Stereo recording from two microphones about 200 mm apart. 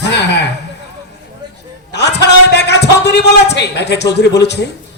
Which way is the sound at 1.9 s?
60° left (ahead or behind).